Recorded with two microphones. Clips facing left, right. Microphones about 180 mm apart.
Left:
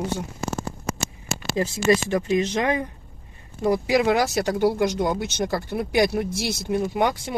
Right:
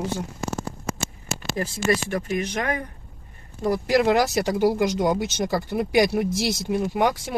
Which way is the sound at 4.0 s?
Centre (ahead or behind).